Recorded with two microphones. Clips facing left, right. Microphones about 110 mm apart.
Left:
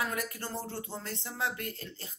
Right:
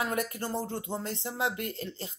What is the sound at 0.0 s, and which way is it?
Speech, 25° right (ahead or behind).